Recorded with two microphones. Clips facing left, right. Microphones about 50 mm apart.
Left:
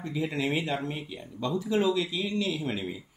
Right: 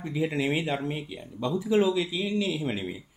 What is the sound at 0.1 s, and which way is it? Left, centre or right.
Speech, centre.